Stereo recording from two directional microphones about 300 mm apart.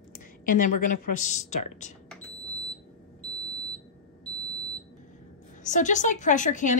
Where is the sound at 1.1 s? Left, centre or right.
Left.